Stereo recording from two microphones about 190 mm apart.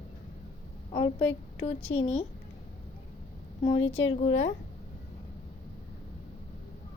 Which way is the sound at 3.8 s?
90° left.